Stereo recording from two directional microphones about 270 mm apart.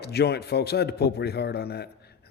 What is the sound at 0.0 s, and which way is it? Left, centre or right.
A man's voice, left.